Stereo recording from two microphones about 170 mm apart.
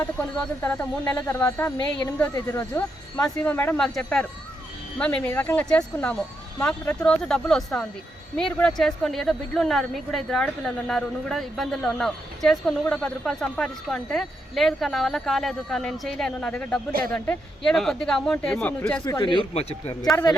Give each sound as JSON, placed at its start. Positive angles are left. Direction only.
{"t": 0.6, "sound": "speech", "side_deg": 10}
{"t": 1.0, "sound": "a woman's voice", "side_deg": 20}
{"t": 19.0, "sound": "speech", "side_deg": 25}